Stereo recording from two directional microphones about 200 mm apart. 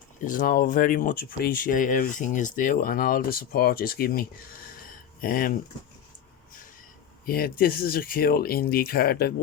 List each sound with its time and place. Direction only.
0.2 s speech: 40° left (ahead or behind)
7.3 s speech: 50° left (ahead or behind)